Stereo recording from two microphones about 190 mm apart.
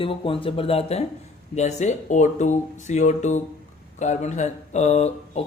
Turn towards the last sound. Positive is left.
turn(degrees=35)  # may be behind; listen again after turning